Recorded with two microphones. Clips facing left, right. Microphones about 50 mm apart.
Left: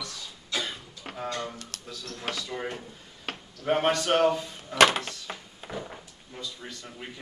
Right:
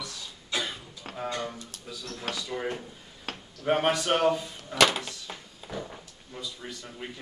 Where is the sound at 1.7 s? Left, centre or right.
Left.